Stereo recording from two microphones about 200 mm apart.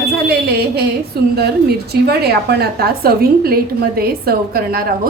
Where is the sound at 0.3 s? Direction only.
50° right (ahead or behind).